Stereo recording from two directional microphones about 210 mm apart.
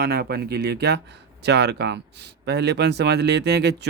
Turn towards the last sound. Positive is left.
turn(degrees=-50)  # may be behind; listen again after turning